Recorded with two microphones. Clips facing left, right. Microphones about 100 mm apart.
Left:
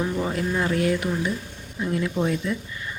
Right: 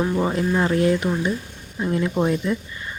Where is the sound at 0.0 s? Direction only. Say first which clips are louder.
Right 4 dB; 30° right (ahead or behind).